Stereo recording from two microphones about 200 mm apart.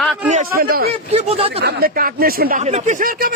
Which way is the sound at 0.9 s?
30° right (ahead or behind).